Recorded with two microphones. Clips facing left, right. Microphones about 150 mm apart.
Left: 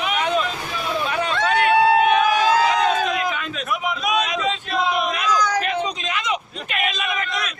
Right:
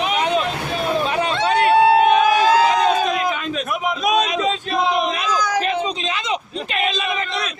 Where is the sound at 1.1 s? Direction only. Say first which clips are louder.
Right 2 dB; 25° right (ahead or behind).